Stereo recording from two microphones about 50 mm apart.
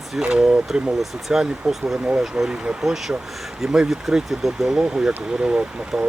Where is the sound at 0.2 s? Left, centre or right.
Centre.